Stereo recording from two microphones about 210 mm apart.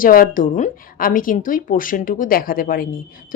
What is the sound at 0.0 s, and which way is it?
A woman's voice, 40° left (ahead or behind).